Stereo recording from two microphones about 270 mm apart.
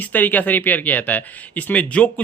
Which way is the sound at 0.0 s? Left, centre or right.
Centre.